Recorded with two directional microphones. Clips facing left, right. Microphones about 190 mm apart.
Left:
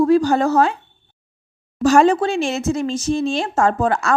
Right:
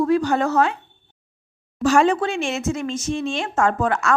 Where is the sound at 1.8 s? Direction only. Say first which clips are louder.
Left 4 dB; 40° left (ahead or behind).